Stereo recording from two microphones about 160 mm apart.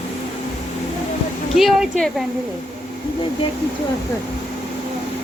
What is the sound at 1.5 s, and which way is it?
Speech, centre (ahead or behind).